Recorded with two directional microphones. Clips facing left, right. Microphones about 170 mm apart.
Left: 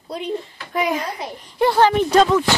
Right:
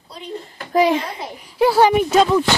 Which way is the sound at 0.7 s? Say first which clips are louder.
Right 6 dB; 30° right (ahead or behind).